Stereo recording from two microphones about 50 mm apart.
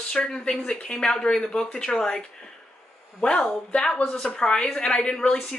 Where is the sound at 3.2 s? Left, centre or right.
Left.